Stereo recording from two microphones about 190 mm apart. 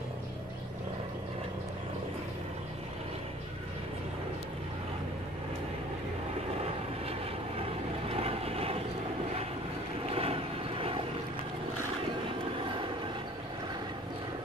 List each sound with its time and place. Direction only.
8.1 s vehicle: 30° right (ahead or behind)
10.0 s vehicle: 30° right (ahead or behind)